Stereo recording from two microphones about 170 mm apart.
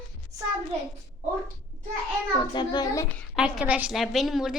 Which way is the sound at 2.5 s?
25° left (ahead or behind).